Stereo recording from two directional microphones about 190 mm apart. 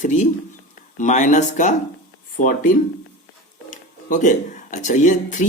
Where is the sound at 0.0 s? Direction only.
40° left (ahead or behind).